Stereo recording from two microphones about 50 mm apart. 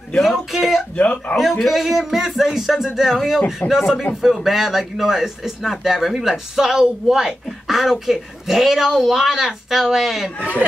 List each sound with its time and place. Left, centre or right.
0.2 s speech: centre
0.9 s speech: left
1.4 s speech: centre